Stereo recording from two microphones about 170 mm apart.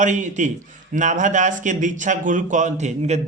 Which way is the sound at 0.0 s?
45° right (ahead or behind).